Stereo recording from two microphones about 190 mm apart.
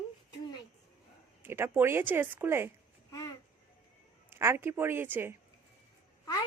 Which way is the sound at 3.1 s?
20° left (ahead or behind).